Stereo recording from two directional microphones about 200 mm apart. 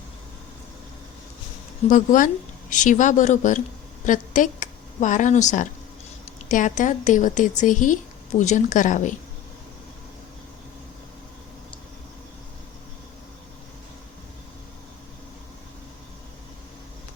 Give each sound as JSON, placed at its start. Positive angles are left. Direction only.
{"t": 1.9, "sound": "a woman's voice", "side_deg": 40}